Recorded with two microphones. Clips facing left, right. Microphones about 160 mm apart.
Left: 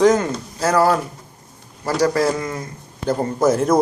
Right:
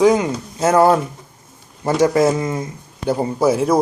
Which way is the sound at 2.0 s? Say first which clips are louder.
Right 3 dB; 20° right (ahead or behind).